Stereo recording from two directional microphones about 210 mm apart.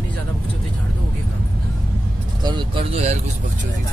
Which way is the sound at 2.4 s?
20° right (ahead or behind).